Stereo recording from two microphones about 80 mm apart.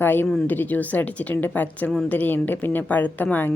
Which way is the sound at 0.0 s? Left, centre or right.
Left.